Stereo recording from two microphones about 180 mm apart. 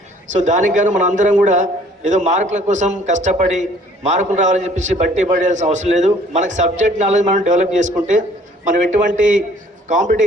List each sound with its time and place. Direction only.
0.3 s a man's voice: 45° right (ahead or behind)